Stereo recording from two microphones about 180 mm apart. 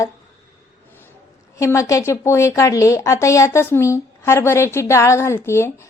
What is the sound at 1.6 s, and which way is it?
A woman's voice, 15° left (ahead or behind).